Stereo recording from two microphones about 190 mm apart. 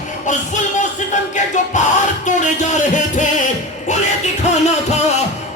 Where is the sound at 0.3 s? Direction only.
40° left (ahead or behind).